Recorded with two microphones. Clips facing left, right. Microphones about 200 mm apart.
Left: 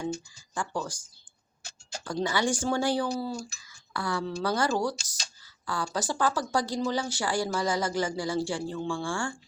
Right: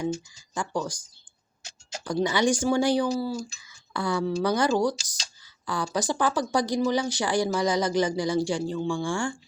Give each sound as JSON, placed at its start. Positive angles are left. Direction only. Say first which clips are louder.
{"t": 0.5, "sound": "speech", "louder": "right 3 dB", "side_deg": -15}
{"t": 2.2, "sound": "speech", "louder": "right 4 dB", "side_deg": -15}
{"t": 3.2, "sound": "a sound", "louder": "right 4 dB", "side_deg": -5}
{"t": 3.9, "sound": "speech", "louder": "right 5 dB", "side_deg": -20}